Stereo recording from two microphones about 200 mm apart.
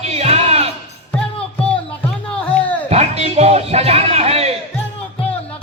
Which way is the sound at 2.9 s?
30° right (ahead or behind).